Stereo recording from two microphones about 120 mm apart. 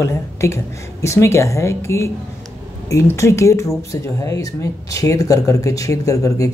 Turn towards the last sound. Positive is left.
turn(degrees=30)  # may be behind; listen again after turning